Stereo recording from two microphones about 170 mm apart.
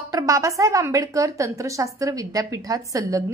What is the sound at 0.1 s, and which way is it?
A woman's voice, 20° right (ahead or behind).